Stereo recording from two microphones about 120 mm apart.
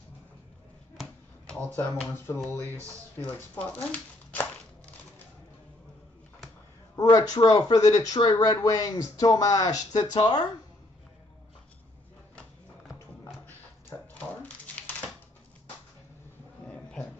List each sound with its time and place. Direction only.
2.0 s speech: 20° left (ahead or behind)
7.0 s speech: 30° left (ahead or behind)
16.6 s dog: 10° left (ahead or behind)